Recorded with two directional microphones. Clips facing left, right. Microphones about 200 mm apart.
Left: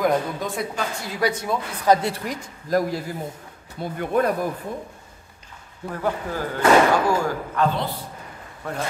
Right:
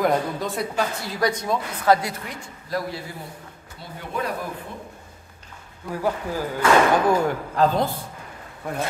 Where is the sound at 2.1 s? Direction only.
45° left (ahead or behind).